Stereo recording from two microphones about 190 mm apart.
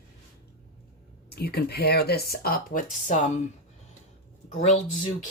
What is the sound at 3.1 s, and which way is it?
Speech, 35° left (ahead or behind).